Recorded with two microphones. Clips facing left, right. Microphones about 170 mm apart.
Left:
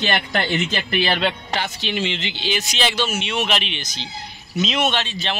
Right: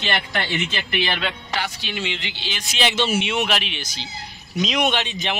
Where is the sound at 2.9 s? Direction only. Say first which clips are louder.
Right 2 dB; 25° right (ahead or behind).